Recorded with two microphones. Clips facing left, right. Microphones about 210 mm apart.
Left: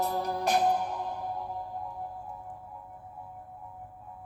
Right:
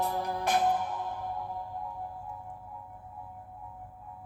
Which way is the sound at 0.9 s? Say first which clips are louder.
Left 1 dB; 10° left (ahead or behind).